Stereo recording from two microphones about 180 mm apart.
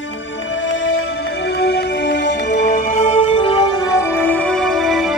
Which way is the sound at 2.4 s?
45° left (ahead or behind).